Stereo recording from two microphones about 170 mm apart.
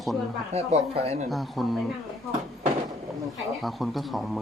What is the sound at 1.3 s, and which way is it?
Speech, centre (ahead or behind).